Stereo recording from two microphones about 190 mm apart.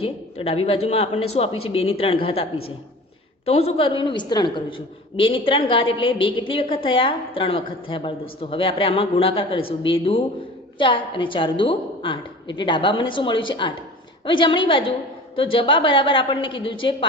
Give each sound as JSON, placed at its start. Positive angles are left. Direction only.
{"t": 0.0, "sound": "a woman's voice", "side_deg": 30}